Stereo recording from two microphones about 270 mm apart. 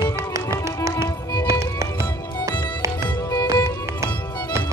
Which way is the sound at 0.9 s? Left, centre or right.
Centre.